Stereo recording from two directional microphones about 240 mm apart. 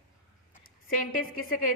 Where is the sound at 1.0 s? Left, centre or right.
Left.